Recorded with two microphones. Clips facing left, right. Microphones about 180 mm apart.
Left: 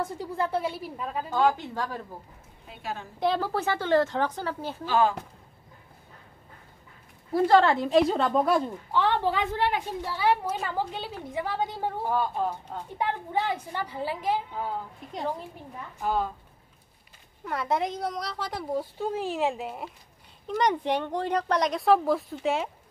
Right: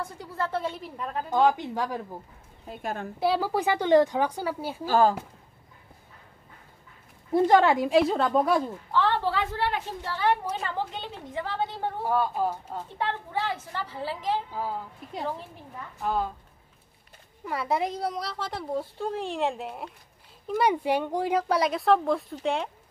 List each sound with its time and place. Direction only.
0.0 s a woman's voice: 15° left (ahead or behind)
1.3 s a woman's voice: 15° right (ahead or behind)
2.7 s a woman's voice: 50° right (ahead or behind)
3.2 s a woman's voice: 10° right (ahead or behind)
4.8 s speech: 40° right (ahead or behind)
7.3 s a woman's voice: 15° right (ahead or behind); by 8.7 s centre (ahead or behind)
8.9 s a woman's voice: 15° left (ahead or behind)
12.1 s a woman's voice: 5° right (ahead or behind)
12.9 s a woman's voice: 15° left (ahead or behind)
16.0 s a woman's voice: centre (ahead or behind)
17.5 s a woman's voice: 5° right (ahead or behind)